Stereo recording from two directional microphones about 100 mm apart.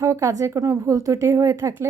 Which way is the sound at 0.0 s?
30° right (ahead or behind).